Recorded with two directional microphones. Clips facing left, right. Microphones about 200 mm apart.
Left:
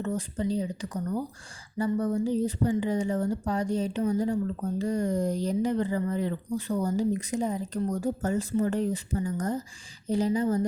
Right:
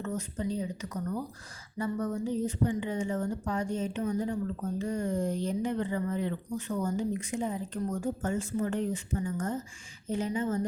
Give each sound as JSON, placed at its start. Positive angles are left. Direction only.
{"t": 0.0, "sound": "speech", "side_deg": 30}